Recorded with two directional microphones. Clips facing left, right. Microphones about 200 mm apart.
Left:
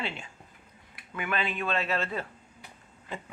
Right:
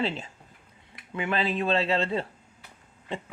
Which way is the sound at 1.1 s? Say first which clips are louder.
Right 4 dB; 30° right (ahead or behind).